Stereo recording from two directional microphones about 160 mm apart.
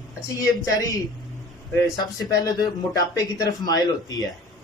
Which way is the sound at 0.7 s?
25° left (ahead or behind).